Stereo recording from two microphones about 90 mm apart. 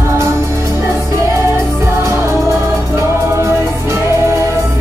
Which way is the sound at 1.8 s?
30° right (ahead or behind).